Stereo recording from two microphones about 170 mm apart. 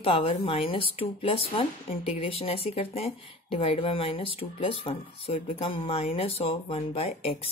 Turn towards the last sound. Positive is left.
turn(degrees=35)  # may be behind; listen again after turning